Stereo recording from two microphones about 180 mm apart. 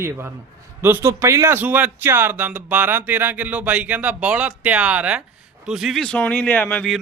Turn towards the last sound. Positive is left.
turn(degrees=5)  # may be behind; listen again after turning